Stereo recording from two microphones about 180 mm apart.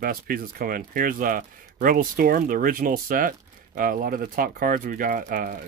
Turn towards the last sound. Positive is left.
turn(degrees=-50)  # may be behind; listen again after turning